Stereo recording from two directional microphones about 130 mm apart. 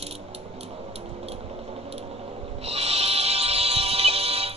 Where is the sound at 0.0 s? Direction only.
55° right (ahead or behind).